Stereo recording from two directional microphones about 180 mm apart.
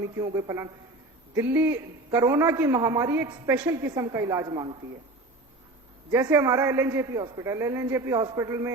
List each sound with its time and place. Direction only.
0.0 s a woman's voice: 15° right (ahead or behind)
6.1 s a woman's voice: 15° right (ahead or behind)